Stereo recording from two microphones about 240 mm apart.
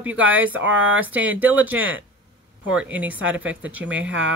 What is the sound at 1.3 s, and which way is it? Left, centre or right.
Speech, centre.